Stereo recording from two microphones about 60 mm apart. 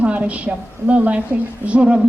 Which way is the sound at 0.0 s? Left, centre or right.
Right.